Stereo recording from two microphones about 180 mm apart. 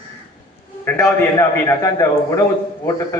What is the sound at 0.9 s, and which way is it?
A man's voice, 15° left (ahead or behind).